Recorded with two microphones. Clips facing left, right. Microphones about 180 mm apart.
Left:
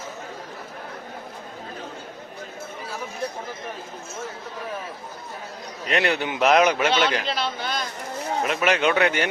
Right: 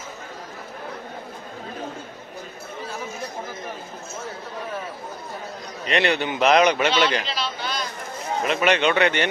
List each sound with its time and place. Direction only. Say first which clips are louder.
5.9 s a man's voice: right 1 dB; centre (ahead or behind)
7.3 s chatter: left 2 dB; 55° left (ahead or behind)
8.4 s a man's voice: right 2 dB; centre (ahead or behind)